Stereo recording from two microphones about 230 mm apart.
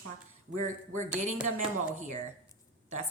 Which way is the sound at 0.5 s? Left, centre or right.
Right.